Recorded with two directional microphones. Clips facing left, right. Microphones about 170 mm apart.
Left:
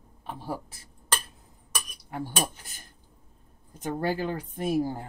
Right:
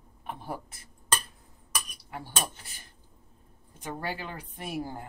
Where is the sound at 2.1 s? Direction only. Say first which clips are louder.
Left 5 dB; 45° left (ahead or behind).